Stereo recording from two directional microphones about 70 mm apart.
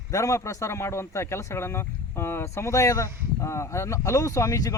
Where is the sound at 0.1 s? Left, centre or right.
Left.